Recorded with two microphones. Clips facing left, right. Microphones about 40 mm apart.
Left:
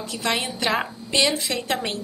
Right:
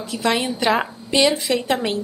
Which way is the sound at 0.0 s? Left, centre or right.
Centre.